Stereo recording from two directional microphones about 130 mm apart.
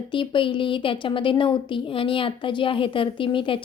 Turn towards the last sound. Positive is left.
turn(degrees=40)  # may be behind; listen again after turning